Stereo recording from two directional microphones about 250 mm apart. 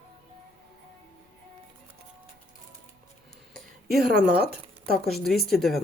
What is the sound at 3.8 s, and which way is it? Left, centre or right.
Speech, right.